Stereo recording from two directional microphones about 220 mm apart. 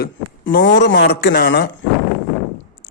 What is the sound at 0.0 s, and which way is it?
A man's voice, 50° left (ahead or behind).